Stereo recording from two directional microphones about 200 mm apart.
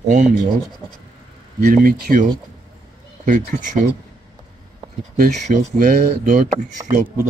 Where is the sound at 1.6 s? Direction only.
50° right (ahead or behind).